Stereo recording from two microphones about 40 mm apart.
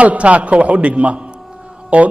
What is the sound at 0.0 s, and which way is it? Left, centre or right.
A man's voice, right.